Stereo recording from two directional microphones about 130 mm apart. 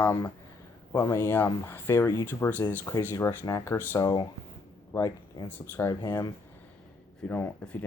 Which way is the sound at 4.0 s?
30° left (ahead or behind).